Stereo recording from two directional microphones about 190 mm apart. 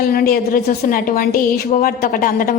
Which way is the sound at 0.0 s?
50° left (ahead or behind).